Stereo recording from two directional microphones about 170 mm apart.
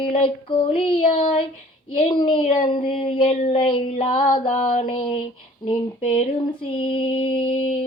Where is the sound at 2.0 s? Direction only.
30° left (ahead or behind).